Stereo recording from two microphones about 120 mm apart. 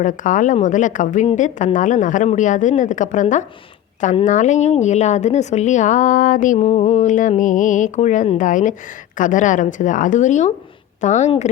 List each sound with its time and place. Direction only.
0.0 s a woman's voice: 90° left